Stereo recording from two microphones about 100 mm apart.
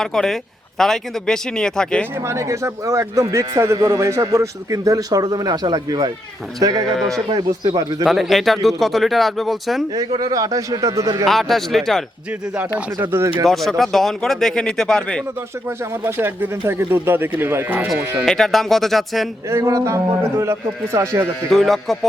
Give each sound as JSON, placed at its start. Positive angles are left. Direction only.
{"t": 0.0, "sound": "a man's voice", "side_deg": 5}
{"t": 2.1, "sound": "a man's voice", "side_deg": -30}
{"t": 6.8, "sound": "a man's voice", "side_deg": 5}
{"t": 7.3, "sound": "a man's voice", "side_deg": -45}
{"t": 8.0, "sound": "a man's voice", "side_deg": 0}
{"t": 10.2, "sound": "a man's voice", "side_deg": -40}
{"t": 11.3, "sound": "a man's voice", "side_deg": 0}
{"t": 13.0, "sound": "speech", "side_deg": -25}
{"t": 13.4, "sound": "a man's voice", "side_deg": 0}
{"t": 15.8, "sound": "speech", "side_deg": -25}
{"t": 18.3, "sound": "a man's voice", "side_deg": 0}
{"t": 19.5, "sound": "speech", "side_deg": -30}
{"t": 21.5, "sound": "a man's voice", "side_deg": 0}